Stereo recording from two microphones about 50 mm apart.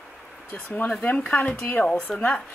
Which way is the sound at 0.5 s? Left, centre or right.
Left.